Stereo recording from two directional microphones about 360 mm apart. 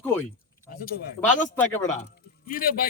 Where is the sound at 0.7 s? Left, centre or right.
Left.